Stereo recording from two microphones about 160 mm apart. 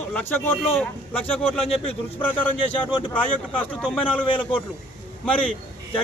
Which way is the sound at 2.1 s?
10° left (ahead or behind).